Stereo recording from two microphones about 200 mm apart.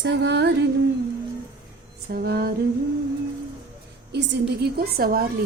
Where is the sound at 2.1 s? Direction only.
50° right (ahead or behind).